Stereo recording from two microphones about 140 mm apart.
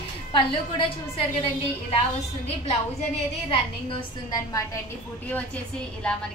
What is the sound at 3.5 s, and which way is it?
Speech, 40° left (ahead or behind).